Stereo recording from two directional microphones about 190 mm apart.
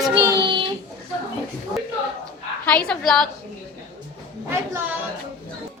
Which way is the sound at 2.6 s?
5° left (ahead or behind).